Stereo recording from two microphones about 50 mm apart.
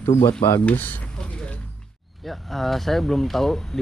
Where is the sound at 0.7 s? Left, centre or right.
Left.